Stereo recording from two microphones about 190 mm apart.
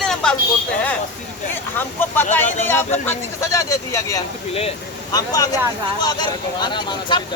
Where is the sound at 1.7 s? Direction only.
10° left (ahead or behind).